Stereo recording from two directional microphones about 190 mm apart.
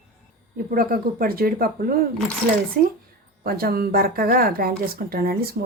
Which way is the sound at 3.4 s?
50° right (ahead or behind).